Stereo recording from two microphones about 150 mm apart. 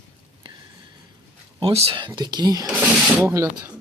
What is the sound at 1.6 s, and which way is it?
Speech, 40° right (ahead or behind).